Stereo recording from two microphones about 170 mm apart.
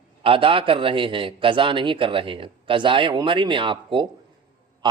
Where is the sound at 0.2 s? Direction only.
30° right (ahead or behind).